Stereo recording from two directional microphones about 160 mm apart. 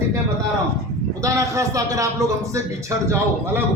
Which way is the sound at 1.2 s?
20° right (ahead or behind).